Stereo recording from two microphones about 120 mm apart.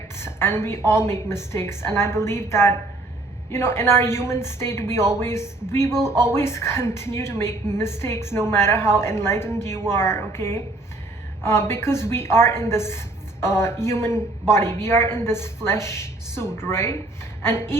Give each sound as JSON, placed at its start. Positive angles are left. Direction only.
{"t": 0.2, "sound": "a woman's voice", "side_deg": 20}